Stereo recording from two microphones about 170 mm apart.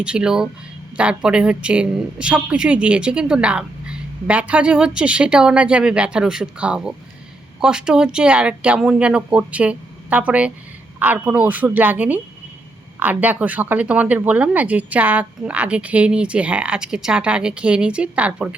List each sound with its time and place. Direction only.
0.0 s a woman's voice: 5° right (ahead or behind)